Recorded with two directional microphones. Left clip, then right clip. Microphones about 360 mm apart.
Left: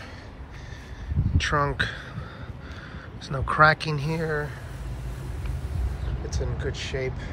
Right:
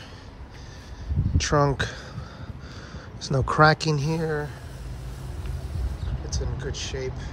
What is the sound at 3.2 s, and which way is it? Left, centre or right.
Speech, centre.